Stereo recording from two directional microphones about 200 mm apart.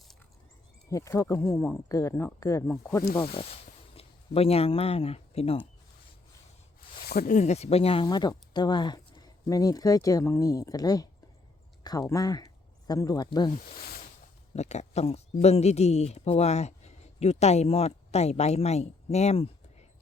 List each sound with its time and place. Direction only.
0.9 s speech: 15° left (ahead or behind)
3.9 s speech: 30° left (ahead or behind)
7.0 s speech: 50° left (ahead or behind); by 13.5 s 20° left (ahead or behind)
13.7 s a sound: 50° left (ahead or behind)
14.5 s speech: 35° left (ahead or behind)